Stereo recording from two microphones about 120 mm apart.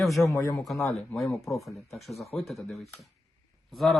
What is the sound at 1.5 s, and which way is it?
Speech, 25° left (ahead or behind).